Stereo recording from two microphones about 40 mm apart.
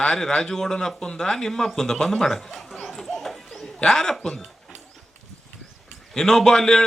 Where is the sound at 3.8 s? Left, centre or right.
Centre.